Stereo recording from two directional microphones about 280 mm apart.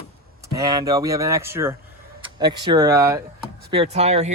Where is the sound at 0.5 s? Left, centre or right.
Centre.